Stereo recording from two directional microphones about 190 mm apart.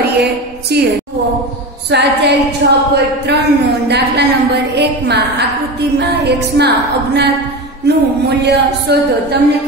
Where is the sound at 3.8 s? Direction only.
60° right (ahead or behind).